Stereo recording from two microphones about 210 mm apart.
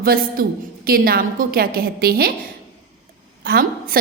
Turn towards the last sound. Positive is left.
turn(degrees=-45)  # may be behind; listen again after turning